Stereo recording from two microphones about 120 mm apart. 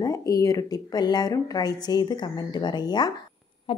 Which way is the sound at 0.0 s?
30° left (ahead or behind).